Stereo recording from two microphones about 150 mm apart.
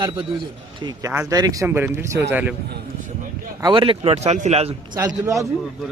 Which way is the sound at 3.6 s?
35° right (ahead or behind).